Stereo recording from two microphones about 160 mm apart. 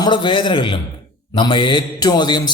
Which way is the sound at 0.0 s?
30° left (ahead or behind).